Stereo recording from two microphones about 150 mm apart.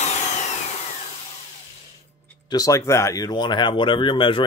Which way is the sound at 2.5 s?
20° left (ahead or behind).